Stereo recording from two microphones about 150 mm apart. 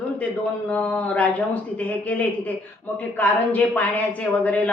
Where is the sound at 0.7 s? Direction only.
10° left (ahead or behind).